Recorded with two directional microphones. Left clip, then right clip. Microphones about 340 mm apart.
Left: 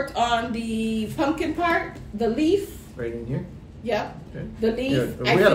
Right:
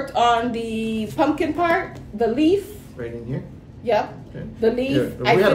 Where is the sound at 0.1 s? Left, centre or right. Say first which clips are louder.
Right 8 dB; centre.